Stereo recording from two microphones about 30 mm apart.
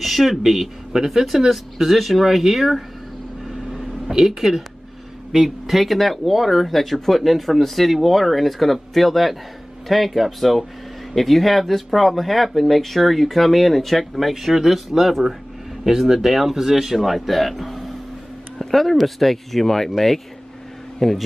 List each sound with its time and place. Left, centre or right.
0.0 s speech: centre
3.4 s vehicle: centre
4.1 s speech: centre
5.7 s speech: centre
16.1 s speech: centre
17.0 s speech: centre
21.0 s speech: centre